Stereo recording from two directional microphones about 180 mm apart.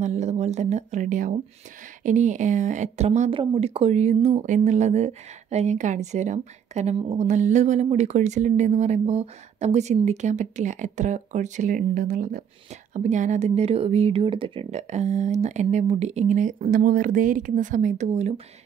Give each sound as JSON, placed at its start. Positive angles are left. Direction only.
{"t": 0.0, "sound": "speech", "side_deg": -40}